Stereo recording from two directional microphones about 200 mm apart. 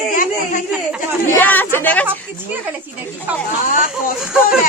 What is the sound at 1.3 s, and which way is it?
Speech, 10° left (ahead or behind).